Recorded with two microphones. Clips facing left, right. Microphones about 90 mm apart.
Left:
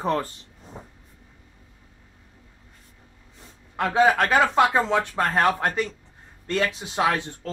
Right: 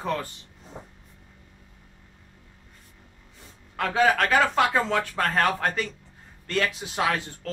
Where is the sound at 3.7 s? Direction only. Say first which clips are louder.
Left 3 dB; 20° left (ahead or behind).